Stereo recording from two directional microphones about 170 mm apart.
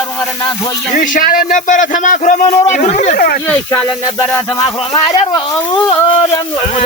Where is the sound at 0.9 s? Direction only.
50° left (ahead or behind).